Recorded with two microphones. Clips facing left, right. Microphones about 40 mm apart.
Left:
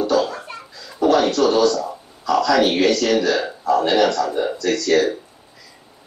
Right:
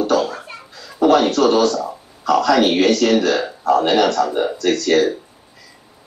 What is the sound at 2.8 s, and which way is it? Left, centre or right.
A man's voice, right.